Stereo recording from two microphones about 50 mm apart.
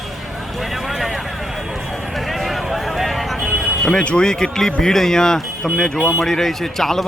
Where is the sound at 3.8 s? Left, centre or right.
Centre.